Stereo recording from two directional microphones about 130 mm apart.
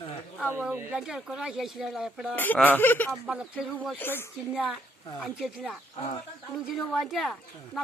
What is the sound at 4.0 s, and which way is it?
Speech, 15° left (ahead or behind).